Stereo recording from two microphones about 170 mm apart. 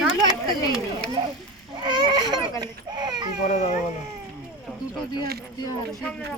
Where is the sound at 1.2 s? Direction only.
30° right (ahead or behind).